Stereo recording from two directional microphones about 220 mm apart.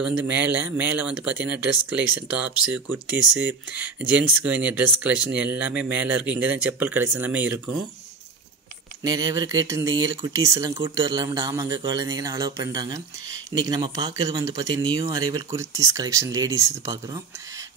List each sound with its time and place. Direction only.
0.2 s speech: 10° right (ahead or behind)
9.0 s speech: 15° right (ahead or behind)